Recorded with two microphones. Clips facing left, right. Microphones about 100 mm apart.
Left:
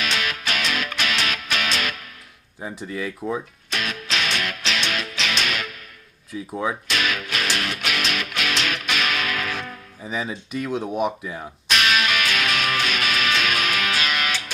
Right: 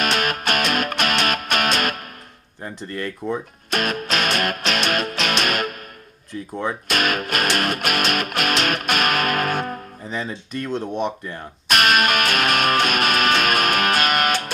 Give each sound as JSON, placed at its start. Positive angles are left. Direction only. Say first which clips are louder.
{"t": 0.0, "sound": "music", "louder": "right 5 dB", "side_deg": -50}
{"t": 2.6, "sound": "speech", "louder": "even", "side_deg": 5}
{"t": 3.7, "sound": "music", "louder": "right 6 dB", "side_deg": -50}
{"t": 6.3, "sound": "speech", "louder": "even", "side_deg": 5}
{"t": 6.8, "sound": "music", "louder": "right 4 dB", "side_deg": -50}
{"t": 10.0, "sound": "speech", "louder": "left 3 dB", "side_deg": 5}
{"t": 11.7, "sound": "music", "louder": "right 4 dB", "side_deg": -50}